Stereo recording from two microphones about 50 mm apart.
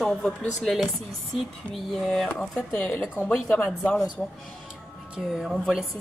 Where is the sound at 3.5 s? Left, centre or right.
Left.